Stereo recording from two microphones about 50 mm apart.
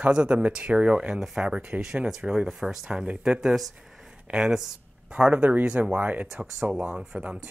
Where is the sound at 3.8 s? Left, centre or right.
Centre.